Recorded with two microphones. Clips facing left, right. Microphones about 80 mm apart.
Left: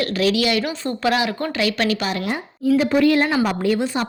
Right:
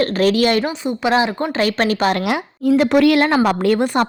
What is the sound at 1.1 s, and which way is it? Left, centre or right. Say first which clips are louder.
A woman's voice: right 4 dB; right.